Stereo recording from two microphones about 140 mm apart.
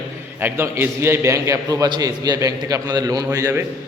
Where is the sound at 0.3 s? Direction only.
15° right (ahead or behind).